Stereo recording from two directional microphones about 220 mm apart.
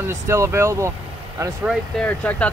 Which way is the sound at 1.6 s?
5° left (ahead or behind).